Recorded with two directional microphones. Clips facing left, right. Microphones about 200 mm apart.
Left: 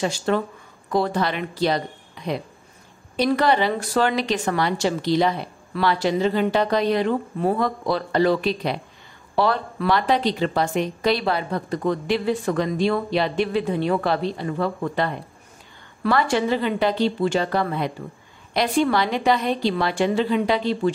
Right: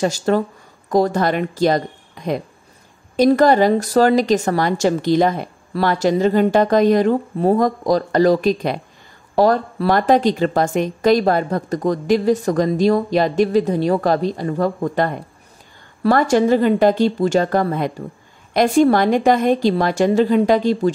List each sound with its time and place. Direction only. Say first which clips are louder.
0.0 s a woman's voice: right 5 dB; 40° right (ahead or behind)